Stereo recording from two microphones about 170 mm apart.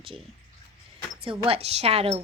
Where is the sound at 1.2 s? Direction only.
35° right (ahead or behind).